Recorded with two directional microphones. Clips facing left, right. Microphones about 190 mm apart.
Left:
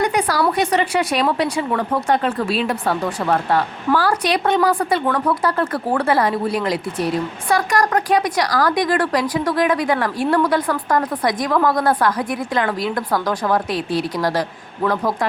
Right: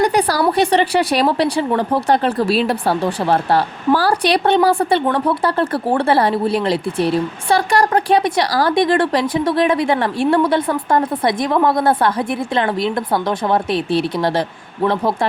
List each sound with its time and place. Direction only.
0.0 s a woman's voice: 35° right (ahead or behind)